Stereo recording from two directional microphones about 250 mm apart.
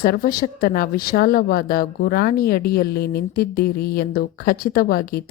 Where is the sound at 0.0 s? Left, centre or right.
Left.